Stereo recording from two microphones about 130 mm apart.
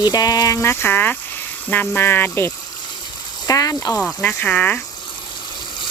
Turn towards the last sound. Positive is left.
turn(degrees=10)  # may be behind; listen again after turning